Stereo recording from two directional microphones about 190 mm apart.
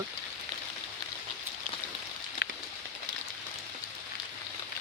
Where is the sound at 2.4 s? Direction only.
60° left (ahead or behind).